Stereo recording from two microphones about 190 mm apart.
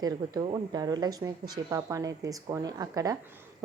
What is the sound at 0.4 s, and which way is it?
A woman's voice, 20° right (ahead or behind).